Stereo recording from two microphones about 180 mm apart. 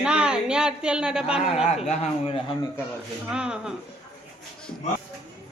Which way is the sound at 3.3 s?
5° right (ahead or behind).